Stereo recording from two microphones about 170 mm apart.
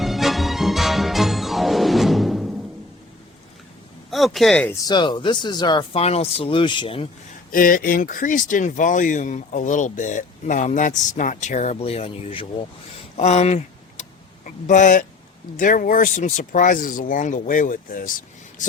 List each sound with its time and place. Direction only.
0.0 s music: centre (ahead or behind)
4.1 s speech: centre (ahead or behind)
4.7 s speech: 20° left (ahead or behind)
7.5 s speech: 55° left (ahead or behind); by 12.5 s 35° left (ahead or behind)
13.1 s a sound: 40° left (ahead or behind)
15.5 s speech: 50° left (ahead or behind)